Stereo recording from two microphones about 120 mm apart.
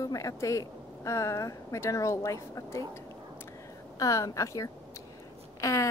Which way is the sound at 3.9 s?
30° left (ahead or behind).